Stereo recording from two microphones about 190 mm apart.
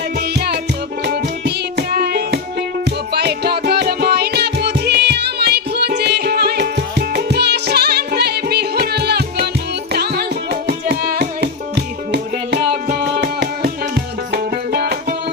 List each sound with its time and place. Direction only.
0.2 s music: 60° right (ahead or behind)